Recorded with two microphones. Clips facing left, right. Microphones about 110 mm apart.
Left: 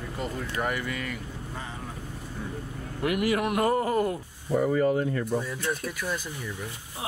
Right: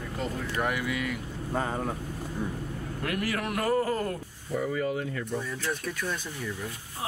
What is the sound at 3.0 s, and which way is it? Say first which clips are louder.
Speech: left 6 dB; 15° left (ahead or behind).